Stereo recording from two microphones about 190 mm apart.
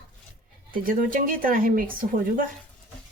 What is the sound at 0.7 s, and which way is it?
Speech, 50° right (ahead or behind).